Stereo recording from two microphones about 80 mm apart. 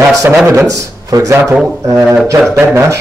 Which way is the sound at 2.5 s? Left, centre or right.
Right.